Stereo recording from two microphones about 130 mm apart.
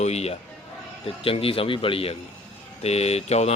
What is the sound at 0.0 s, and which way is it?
A man's voice, 55° left (ahead or behind).